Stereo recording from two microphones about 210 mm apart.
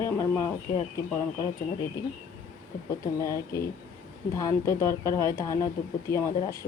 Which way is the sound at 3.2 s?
15° left (ahead or behind).